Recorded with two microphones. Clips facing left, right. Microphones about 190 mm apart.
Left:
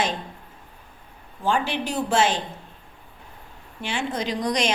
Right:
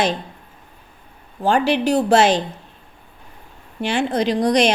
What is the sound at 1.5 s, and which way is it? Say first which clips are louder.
Speech: right 8 dB; 70° right (ahead or behind).